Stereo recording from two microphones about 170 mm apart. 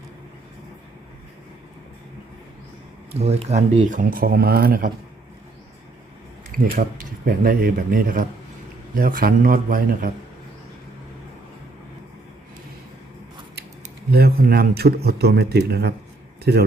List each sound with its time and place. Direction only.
3.2 s speech: 40° right (ahead or behind); by 4.9 s 60° right (ahead or behind)
6.7 s speech: 55° right (ahead or behind)
14.1 s a man's voice: 65° right (ahead or behind)